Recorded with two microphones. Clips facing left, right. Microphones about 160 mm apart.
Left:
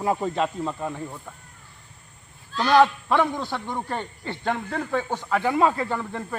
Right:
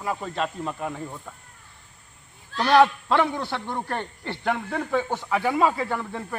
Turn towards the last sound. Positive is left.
turn(degrees=-5)  # may be behind; listen again after turning